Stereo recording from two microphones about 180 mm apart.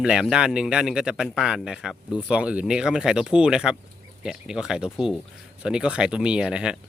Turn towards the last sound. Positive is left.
turn(degrees=-5)  # may be behind; listen again after turning